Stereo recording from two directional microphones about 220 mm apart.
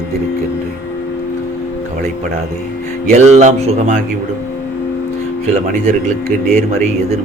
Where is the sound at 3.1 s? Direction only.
30° right (ahead or behind).